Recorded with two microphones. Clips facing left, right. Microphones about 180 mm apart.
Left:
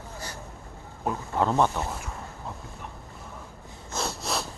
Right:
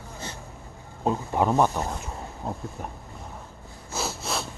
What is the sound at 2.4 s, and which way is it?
Speech, 40° right (ahead or behind).